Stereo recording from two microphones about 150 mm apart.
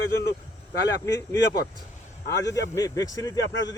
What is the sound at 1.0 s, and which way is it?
Speech, 25° left (ahead or behind).